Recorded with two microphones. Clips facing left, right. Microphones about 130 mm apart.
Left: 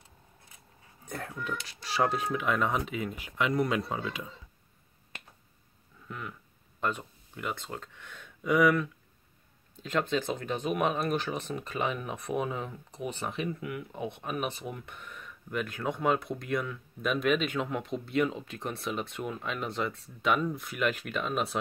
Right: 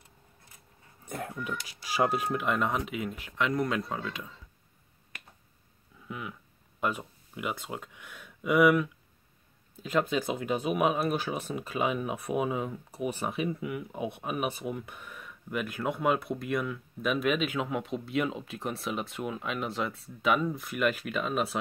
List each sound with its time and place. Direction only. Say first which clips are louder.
1.0 s speech: right 1 dB; 5° right (ahead or behind)
5.1 s finger snapping: left 1 dB; 25° left (ahead or behind)
6.0 s a sound: right 2 dB; 5° right (ahead or behind)
6.8 s speech: right 1 dB; 10° right (ahead or behind)